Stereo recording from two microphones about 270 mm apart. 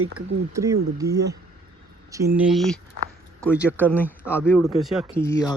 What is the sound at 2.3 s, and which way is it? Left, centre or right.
Speech, centre.